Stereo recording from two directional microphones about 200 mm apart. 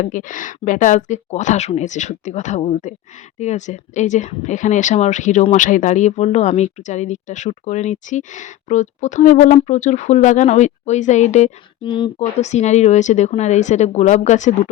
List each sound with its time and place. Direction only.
0.0 s speech: 40° left (ahead or behind)
11.8 s speech: 25° left (ahead or behind)